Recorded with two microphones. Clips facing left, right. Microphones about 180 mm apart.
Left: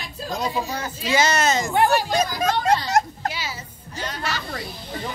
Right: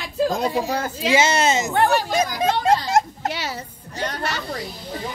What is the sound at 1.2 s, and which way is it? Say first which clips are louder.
Speech: right 1 dB; 25° right (ahead or behind).